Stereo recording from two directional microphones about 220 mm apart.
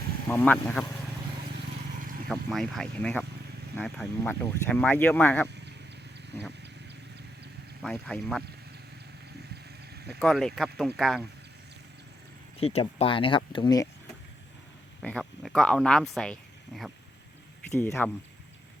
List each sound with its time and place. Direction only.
0.3 s speech: 10° left (ahead or behind)
2.2 s speech: centre (ahead or behind)
7.8 s speech: 5° left (ahead or behind)
9.9 s vehicle: 45° right (ahead or behind)
10.2 s speech: centre (ahead or behind)
12.5 s speech: 25° left (ahead or behind)
15.0 s speech: 5° left (ahead or behind)